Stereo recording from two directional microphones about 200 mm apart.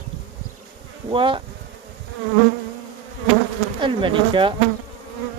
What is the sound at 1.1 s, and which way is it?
Speech, 25° right (ahead or behind).